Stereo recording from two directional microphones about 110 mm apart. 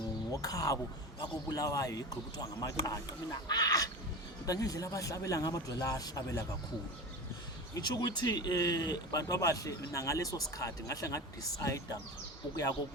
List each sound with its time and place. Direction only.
0.4 s speech: 30° left (ahead or behind)
7.7 s speech: 40° left (ahead or behind)